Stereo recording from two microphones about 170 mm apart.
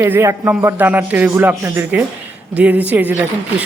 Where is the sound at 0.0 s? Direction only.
15° right (ahead or behind).